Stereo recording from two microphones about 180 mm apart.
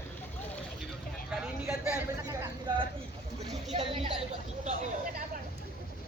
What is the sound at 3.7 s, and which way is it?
Speech, 35° right (ahead or behind).